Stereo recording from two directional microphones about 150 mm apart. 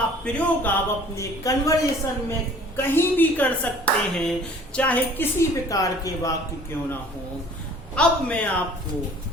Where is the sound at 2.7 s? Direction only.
15° left (ahead or behind).